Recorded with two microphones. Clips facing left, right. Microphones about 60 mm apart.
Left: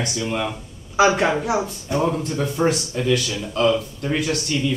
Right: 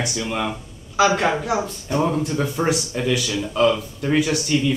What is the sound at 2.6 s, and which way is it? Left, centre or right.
Speech, centre.